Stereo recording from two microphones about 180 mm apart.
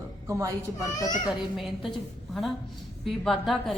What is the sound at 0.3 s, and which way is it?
Speech, 15° right (ahead or behind).